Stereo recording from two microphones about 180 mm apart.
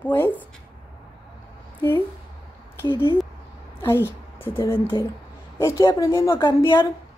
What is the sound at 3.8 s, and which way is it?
A woman's voice, 15° left (ahead or behind).